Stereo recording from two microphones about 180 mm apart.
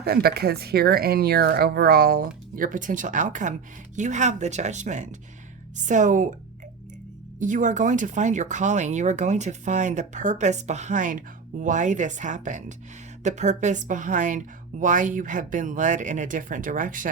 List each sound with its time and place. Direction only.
0.0 s a woman's voice: 60° right (ahead or behind); by 6.2 s 45° right (ahead or behind)
7.3 s a woman's voice: 45° right (ahead or behind)